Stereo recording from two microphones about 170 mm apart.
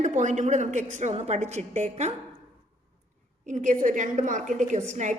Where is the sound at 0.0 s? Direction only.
45° right (ahead or behind).